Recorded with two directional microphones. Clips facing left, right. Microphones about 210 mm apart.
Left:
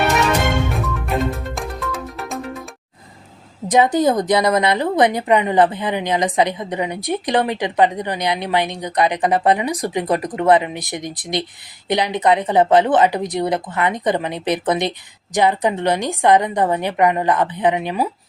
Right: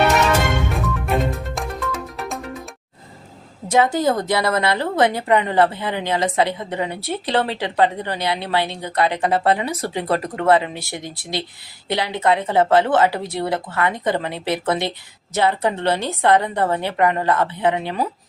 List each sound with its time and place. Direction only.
0.7 s music: centre (ahead or behind)
3.7 s a woman's voice: 20° left (ahead or behind)